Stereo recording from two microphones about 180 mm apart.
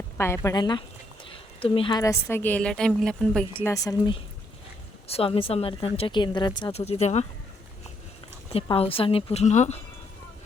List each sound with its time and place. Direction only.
0.2 s a woman's voice: 15° left (ahead or behind)
1.2 s a sound: 30° left (ahead or behind)
2.2 s a woman's voice: 10° left (ahead or behind)
3.7 s a woman's voice: 25° left (ahead or behind)
8.7 s speech: 30° left (ahead or behind)